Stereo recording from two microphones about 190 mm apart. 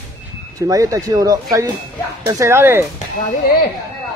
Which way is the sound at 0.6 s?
20° right (ahead or behind).